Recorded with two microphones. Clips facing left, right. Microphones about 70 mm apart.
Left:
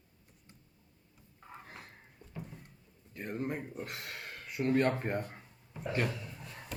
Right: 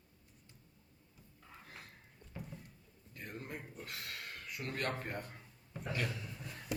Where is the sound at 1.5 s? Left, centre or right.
Left.